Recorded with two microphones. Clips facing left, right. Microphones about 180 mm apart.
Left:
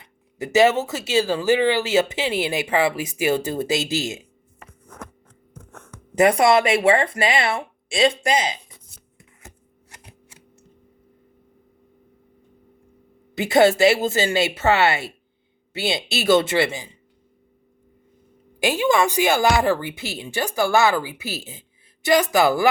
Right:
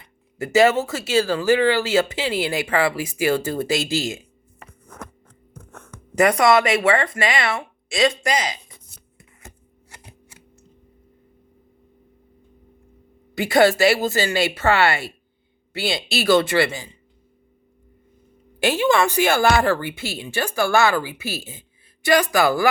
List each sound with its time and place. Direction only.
0.0 s speech: 20° left (ahead or behind)
6.1 s speech: 25° left (ahead or behind)
13.3 s speech: 25° left (ahead or behind)
18.6 s speech: 15° left (ahead or behind)